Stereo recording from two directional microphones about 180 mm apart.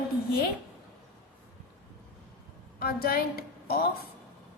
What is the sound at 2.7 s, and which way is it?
A woman's voice, 55° left (ahead or behind).